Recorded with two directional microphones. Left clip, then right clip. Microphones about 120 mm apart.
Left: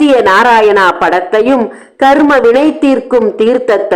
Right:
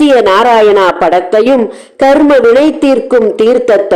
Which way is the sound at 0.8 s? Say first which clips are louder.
Right 1 dB; 20° right (ahead or behind).